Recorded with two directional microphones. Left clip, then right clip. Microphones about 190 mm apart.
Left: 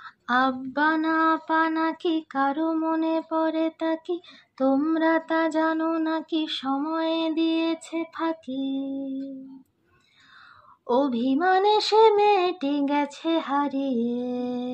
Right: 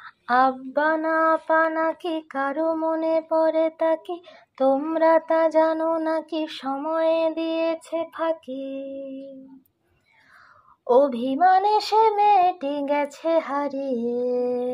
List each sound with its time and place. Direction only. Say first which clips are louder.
0.3 s child singing: right 4 dB; 20° right (ahead or behind)
10.9 s child singing: right 5 dB; 25° right (ahead or behind)